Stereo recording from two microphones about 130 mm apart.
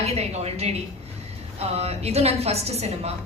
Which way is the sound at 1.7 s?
55° right (ahead or behind).